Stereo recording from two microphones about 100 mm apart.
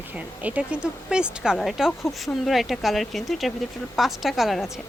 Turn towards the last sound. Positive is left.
turn(degrees=0)  # may be behind; listen again after turning